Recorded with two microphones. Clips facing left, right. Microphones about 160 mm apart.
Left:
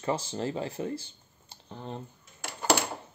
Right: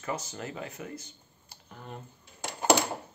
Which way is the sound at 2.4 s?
20° right (ahead or behind).